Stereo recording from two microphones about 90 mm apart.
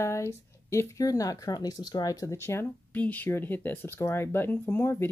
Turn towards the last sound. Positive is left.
turn(degrees=25)  # may be behind; listen again after turning